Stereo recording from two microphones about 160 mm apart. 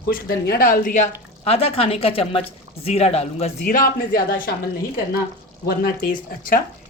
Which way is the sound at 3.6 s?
60° left (ahead or behind).